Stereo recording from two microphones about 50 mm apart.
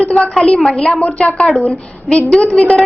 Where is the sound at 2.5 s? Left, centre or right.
Centre.